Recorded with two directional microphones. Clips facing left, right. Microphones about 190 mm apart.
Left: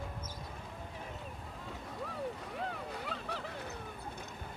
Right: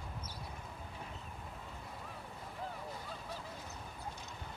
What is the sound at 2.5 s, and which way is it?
Vehicle, 80° left.